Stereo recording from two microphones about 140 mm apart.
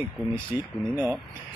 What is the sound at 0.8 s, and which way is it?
Speech, 20° right (ahead or behind).